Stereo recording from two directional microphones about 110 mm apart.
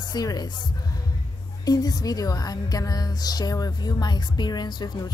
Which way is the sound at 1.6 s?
35° left (ahead or behind).